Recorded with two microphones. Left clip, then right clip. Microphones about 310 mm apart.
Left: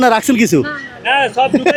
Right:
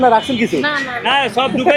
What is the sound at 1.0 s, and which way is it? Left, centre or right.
Speech, left.